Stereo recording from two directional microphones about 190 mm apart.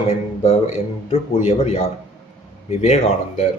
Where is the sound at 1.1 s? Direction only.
30° left (ahead or behind).